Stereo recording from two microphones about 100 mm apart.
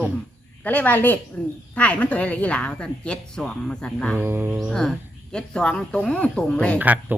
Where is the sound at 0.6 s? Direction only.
15° left (ahead or behind).